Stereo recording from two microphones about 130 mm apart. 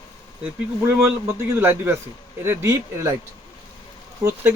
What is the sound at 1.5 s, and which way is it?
Speech, 15° right (ahead or behind).